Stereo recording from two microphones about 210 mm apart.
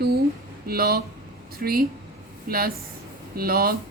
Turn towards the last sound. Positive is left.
turn(degrees=-45)  # may be behind; listen again after turning